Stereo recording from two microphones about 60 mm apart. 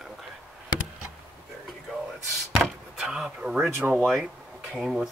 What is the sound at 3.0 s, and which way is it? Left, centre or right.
Speech, centre.